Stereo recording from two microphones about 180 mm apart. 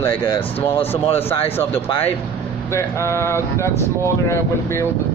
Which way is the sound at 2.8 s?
15° left (ahead or behind).